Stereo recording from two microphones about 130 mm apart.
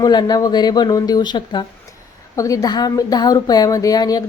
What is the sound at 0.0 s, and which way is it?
A woman's voice, 30° left (ahead or behind).